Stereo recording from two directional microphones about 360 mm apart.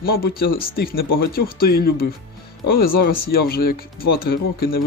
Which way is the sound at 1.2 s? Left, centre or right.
Left.